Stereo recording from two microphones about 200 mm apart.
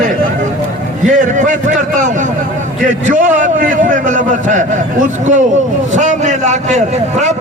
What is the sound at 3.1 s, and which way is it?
A man's voice, 40° right (ahead or behind).